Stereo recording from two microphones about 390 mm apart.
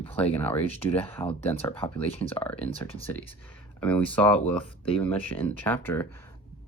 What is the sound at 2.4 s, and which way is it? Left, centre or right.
Speech, centre.